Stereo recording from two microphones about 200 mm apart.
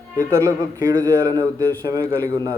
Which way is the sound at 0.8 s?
20° right (ahead or behind).